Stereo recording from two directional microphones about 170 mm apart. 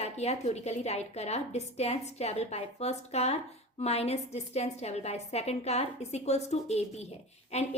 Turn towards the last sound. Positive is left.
turn(degrees=40)  # may be behind; listen again after turning